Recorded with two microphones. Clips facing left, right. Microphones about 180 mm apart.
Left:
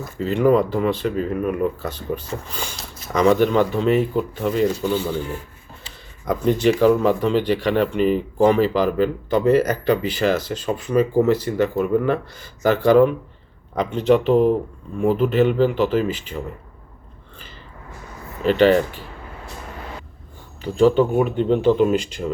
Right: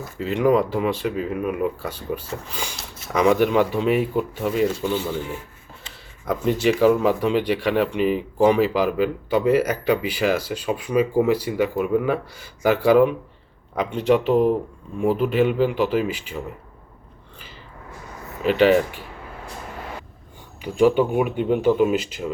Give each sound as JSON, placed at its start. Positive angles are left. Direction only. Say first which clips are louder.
{"t": 0.2, "sound": "speech", "louder": "left 2 dB", "side_deg": -5}
{"t": 18.4, "sound": "speech", "louder": "left 1 dB", "side_deg": -5}
{"t": 20.6, "sound": "speech", "louder": "left 2 dB", "side_deg": -10}